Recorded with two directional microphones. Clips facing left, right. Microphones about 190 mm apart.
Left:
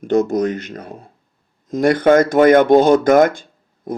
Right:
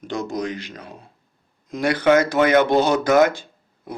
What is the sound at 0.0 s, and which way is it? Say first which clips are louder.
Speech: left 10 dB; 50° left (ahead or behind).